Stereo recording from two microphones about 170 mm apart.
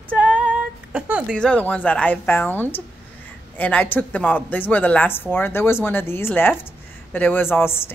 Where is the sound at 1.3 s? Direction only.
5° left (ahead or behind).